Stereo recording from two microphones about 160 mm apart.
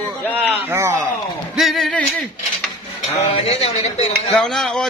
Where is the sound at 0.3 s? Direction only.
15° right (ahead or behind).